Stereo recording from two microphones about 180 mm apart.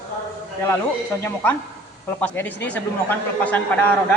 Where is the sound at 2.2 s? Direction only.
10° left (ahead or behind).